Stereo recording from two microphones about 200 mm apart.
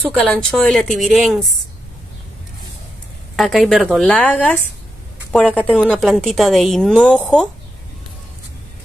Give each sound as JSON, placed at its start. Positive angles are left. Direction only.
{"t": 0.1, "sound": "a woman's voice", "side_deg": 5}
{"t": 3.3, "sound": "a woman's voice", "side_deg": 0}
{"t": 5.3, "sound": "a woman's voice", "side_deg": -5}